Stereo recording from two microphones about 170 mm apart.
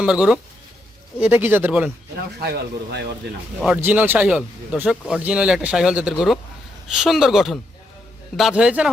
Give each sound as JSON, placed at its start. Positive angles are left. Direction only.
{"t": 0.0, "sound": "speech", "side_deg": -5}
{"t": 2.4, "sound": "speech", "side_deg": -70}
{"t": 3.8, "sound": "speech", "side_deg": -10}